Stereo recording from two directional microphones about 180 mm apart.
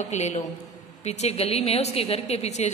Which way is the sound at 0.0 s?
40° left (ahead or behind).